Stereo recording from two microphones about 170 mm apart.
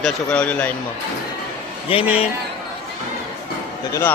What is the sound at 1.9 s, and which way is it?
Speech, 35° left (ahead or behind).